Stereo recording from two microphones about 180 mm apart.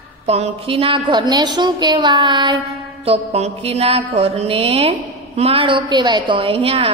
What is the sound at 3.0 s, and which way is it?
Music, 35° right (ahead or behind).